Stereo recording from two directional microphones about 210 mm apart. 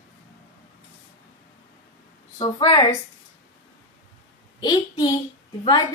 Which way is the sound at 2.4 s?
20° left (ahead or behind).